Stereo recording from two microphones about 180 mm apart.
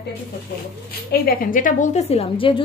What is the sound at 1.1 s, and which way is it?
A woman's voice, 55° left (ahead or behind).